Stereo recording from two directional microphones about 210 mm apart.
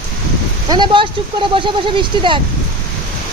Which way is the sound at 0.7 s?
20° right (ahead or behind).